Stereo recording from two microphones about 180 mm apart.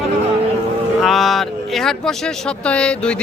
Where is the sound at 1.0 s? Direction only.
Centre (ahead or behind).